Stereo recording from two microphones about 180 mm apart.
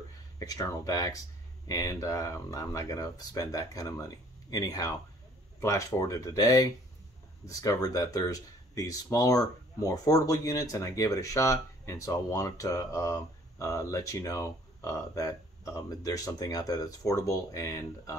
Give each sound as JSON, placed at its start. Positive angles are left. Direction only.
{"t": 0.4, "sound": "speech", "side_deg": 20}